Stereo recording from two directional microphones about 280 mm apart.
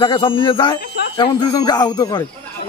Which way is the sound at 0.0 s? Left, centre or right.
Centre.